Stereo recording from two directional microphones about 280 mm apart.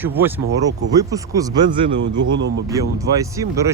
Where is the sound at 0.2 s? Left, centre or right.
Centre.